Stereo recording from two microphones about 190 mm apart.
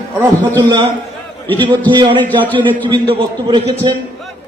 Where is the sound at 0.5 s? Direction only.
25° right (ahead or behind).